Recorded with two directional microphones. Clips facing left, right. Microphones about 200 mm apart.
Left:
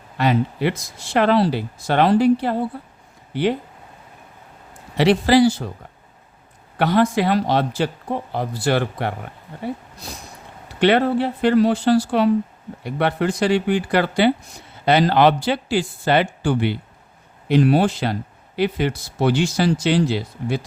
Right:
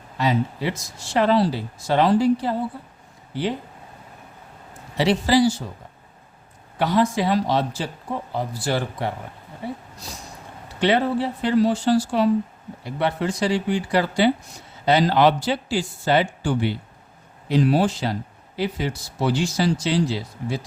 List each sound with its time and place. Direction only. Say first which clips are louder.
0.2 s speech: left 3 dB; 60° left (ahead or behind)
4.9 s speech: left 4 dB; 65° left (ahead or behind)
6.7 s speech: left 3 dB; 60° left (ahead or behind)
10.8 s speech: left 4 dB; 65° left (ahead or behind)